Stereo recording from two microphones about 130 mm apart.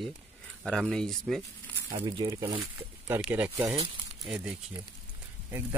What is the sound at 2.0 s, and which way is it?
Speech, 30° right (ahead or behind).